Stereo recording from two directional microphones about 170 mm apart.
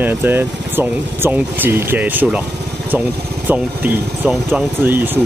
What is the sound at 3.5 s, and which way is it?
Speech, 10° right (ahead or behind).